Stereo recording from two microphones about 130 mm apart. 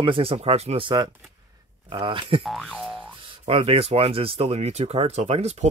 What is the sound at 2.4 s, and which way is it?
Boing, centre (ahead or behind).